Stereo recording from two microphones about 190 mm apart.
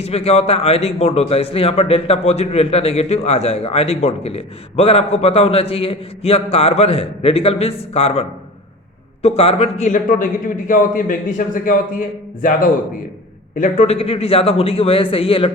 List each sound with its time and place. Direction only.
0.0 s a man's voice: 30° left (ahead or behind)